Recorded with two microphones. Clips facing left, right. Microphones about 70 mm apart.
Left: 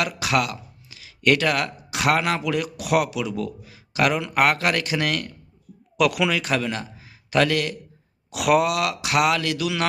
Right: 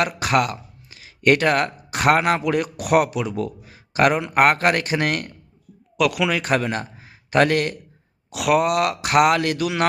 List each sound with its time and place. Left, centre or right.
0.0 s speech: right
6.0 s a man's voice: centre
6.3 s speech: right
8.3 s speech: centre
8.6 s speech: right